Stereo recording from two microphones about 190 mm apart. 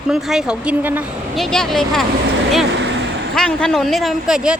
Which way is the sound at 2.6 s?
70° right (ahead or behind).